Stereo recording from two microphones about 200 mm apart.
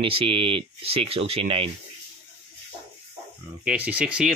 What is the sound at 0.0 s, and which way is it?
Speech, 25° right (ahead or behind).